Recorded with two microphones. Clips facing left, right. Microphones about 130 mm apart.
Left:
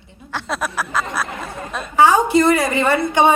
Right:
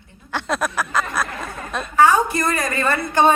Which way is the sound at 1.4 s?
20° left (ahead or behind).